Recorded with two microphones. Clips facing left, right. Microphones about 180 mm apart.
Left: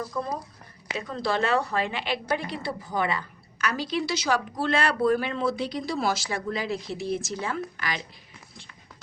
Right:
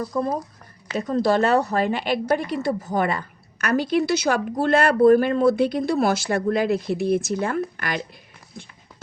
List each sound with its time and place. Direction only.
0.1 s a woman's voice: 50° right (ahead or behind)